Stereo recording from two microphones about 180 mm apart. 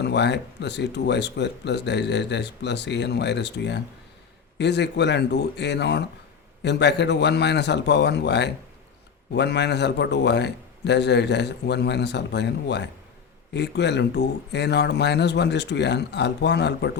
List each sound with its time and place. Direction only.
0.0 s speech: 70° left (ahead or behind)